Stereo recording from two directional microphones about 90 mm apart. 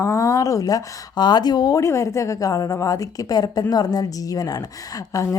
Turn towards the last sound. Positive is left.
turn(degrees=40)  # may be behind; listen again after turning